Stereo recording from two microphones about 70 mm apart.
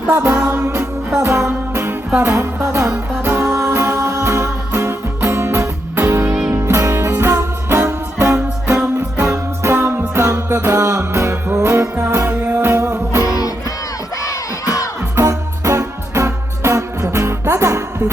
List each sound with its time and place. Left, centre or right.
0.1 s music: right
2.4 s music: right
10.8 s music: right
13.2 s music: left
14.2 s crowd: left
15.1 s music: right